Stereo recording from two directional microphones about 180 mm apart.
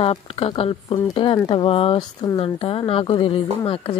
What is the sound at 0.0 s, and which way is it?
A woman's voice, 30° left (ahead or behind).